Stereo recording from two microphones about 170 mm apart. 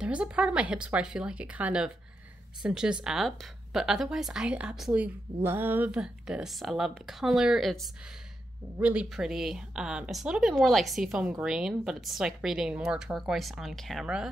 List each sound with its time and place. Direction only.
0.0 s speech: 5° right (ahead or behind)